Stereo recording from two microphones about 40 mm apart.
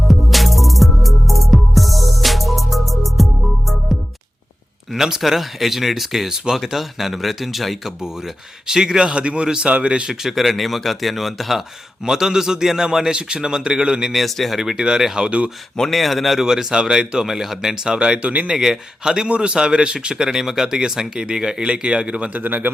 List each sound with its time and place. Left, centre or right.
0.1 s music: centre
4.9 s a man's voice: centre
8.6 s speech: centre; by 9.9 s right
10.2 s a man's voice: centre
14.1 s a man's voice: centre
15.9 s speech: centre
16.4 s a man's voice: centre
17.2 s a man's voice: centre; by 18.5 s right
18.5 s speech: centre
22.4 s a man's voice: right